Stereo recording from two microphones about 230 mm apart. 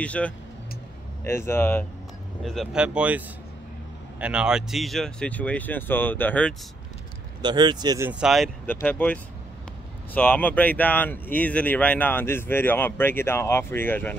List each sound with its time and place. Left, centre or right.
0.0 s speech: centre
7.4 s speech: centre
8.1 s speech: centre